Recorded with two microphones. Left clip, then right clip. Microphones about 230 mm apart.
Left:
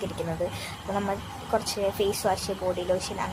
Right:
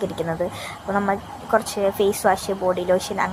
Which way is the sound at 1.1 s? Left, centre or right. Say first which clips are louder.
Right 9 dB; right.